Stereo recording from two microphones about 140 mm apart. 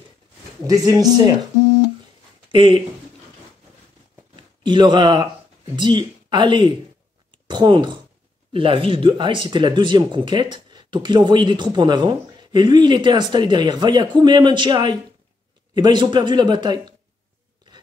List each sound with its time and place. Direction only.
0.7 s speech: 25° right (ahead or behind)
2.5 s speech: 35° right (ahead or behind)
4.4 s a man's voice: 35° right (ahead or behind)